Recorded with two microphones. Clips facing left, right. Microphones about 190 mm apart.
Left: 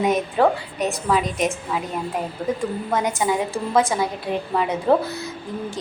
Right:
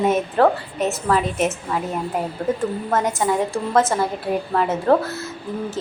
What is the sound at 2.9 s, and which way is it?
A woman's voice, centre (ahead or behind).